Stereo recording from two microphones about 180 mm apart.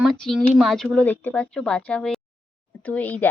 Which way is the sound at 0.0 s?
Centre (ahead or behind).